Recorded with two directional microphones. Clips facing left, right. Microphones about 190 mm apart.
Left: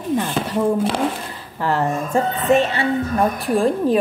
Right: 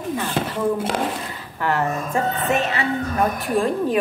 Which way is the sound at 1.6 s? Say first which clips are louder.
Left 2 dB; 30° left (ahead or behind).